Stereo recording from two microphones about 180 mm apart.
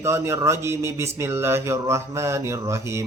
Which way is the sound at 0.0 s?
15° right (ahead or behind).